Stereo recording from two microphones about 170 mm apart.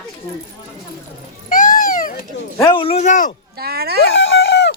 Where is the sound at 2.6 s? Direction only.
30° left (ahead or behind); by 3.3 s 45° left (ahead or behind).